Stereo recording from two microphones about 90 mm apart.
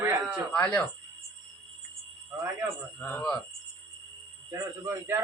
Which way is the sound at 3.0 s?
20° left (ahead or behind).